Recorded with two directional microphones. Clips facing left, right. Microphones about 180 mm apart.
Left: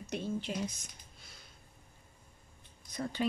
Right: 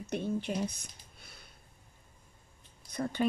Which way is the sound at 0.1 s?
55° right (ahead or behind).